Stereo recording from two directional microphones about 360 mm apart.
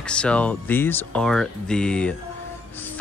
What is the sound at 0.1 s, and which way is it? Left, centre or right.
Speech, centre.